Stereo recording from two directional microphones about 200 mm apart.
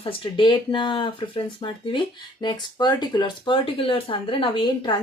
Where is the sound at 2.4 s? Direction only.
20° left (ahead or behind).